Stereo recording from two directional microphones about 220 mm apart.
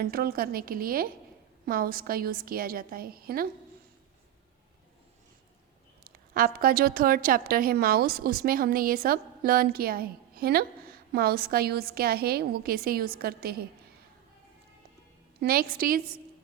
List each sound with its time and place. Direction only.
0.0 s a woman's voice: 40° right (ahead or behind)
6.1 s a woman's voice: 40° right (ahead or behind)
15.4 s a woman's voice: 40° right (ahead or behind)